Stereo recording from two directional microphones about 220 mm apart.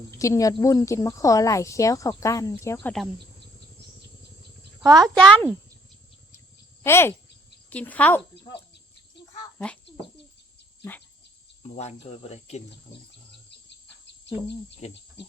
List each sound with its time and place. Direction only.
0.2 s speech: 15° left (ahead or behind)
4.8 s speech: 15° right (ahead or behind)
5.0 s speech: 5° left (ahead or behind)
6.8 s speech: 10° left (ahead or behind)
11.7 s speech: 30° left (ahead or behind)
14.8 s speech: 30° left (ahead or behind)